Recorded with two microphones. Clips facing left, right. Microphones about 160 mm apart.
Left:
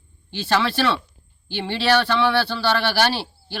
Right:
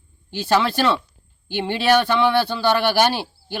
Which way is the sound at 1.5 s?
50° right (ahead or behind).